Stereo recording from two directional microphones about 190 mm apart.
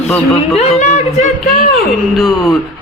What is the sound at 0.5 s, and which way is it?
Speech, 35° left (ahead or behind).